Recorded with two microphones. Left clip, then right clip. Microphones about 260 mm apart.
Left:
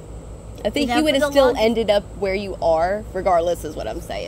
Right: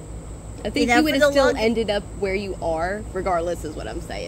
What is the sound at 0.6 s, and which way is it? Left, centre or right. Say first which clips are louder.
A woman's voice: right 1 dB; left.